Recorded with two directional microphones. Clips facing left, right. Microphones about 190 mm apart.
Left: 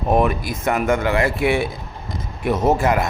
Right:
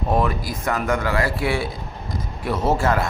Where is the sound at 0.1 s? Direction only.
20° left (ahead or behind).